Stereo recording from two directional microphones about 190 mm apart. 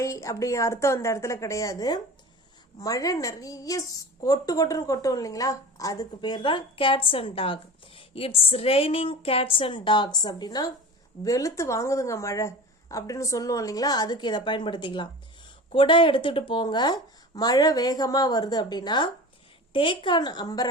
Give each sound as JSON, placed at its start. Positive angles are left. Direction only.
{"t": 0.0, "sound": "a woman's voice", "side_deg": 15}